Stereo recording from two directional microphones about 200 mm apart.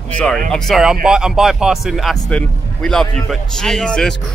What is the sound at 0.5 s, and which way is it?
Speech, centre (ahead or behind).